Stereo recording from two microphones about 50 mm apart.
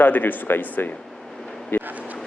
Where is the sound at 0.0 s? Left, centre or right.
Left.